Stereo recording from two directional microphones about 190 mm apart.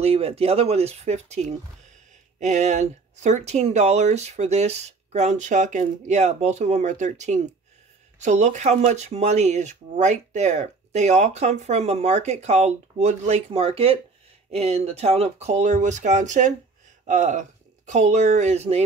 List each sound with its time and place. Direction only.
0.0 s speech: 30° right (ahead or behind)